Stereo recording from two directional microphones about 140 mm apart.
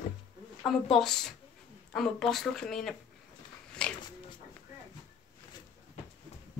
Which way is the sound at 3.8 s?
5° left (ahead or behind).